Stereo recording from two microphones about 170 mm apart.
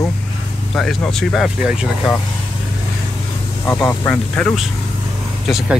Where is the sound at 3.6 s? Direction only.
10° left (ahead or behind).